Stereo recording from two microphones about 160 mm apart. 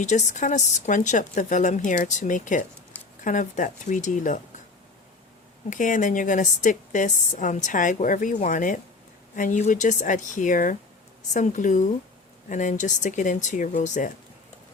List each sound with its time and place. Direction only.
0.0 s a woman's voice: 45° left (ahead or behind)
5.7 s a woman's voice: 55° left (ahead or behind)